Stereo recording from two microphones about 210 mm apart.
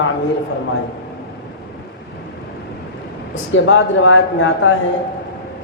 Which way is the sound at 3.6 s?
65° left (ahead or behind).